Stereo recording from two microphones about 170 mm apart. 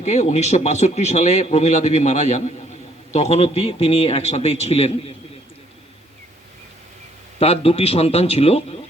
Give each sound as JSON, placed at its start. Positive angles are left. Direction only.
{"t": 0.0, "sound": "a man's voice", "side_deg": 45}
{"t": 7.3, "sound": "a man's voice", "side_deg": 35}